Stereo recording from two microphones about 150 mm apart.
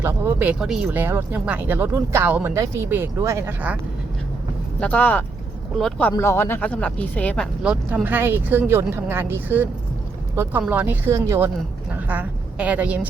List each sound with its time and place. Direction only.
0.0 s speech: 15° right (ahead or behind)
4.8 s speech: 10° left (ahead or behind)
6.1 s speech: 15° left (ahead or behind)
7.6 s a woman's voice: 10° right (ahead or behind)